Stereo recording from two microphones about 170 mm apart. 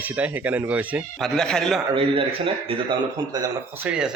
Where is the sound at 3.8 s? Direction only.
5° right (ahead or behind).